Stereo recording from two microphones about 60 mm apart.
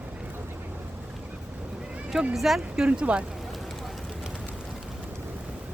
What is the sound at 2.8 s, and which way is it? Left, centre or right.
Speech, centre.